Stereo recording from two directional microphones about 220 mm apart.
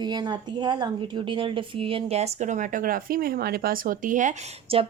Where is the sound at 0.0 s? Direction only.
20° right (ahead or behind).